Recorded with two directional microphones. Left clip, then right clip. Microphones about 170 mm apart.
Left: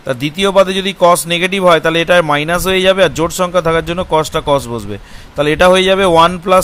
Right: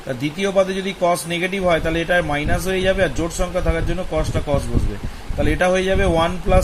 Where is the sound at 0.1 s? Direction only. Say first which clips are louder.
Left 8 dB; 65° left (ahead or behind).